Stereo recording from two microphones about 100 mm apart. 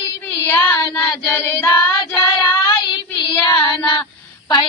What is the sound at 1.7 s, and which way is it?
Child singing, 35° left (ahead or behind).